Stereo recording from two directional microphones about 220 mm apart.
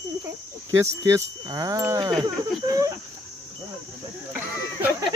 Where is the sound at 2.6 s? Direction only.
15° right (ahead or behind).